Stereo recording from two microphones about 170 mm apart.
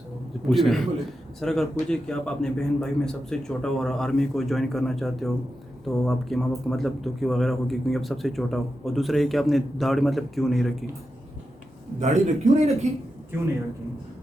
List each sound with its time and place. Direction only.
0.4 s a man's voice: centre (ahead or behind)
11.9 s a man's voice: 40° right (ahead or behind)